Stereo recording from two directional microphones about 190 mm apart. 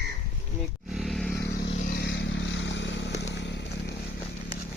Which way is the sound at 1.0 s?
Centre (ahead or behind).